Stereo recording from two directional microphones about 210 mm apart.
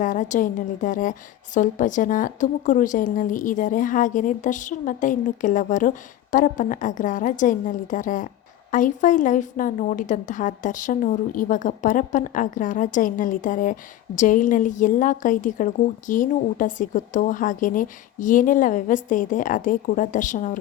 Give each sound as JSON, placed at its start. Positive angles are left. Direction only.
{"t": 0.0, "sound": "a woman's voice", "side_deg": 35}